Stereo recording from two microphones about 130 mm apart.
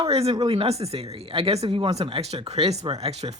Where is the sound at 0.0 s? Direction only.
50° right (ahead or behind).